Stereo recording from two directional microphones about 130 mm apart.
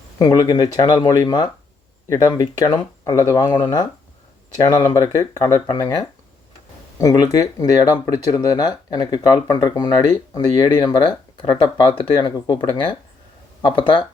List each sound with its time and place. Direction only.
0.2 s speech: 30° left (ahead or behind)
4.9 s speech: 25° left (ahead or behind)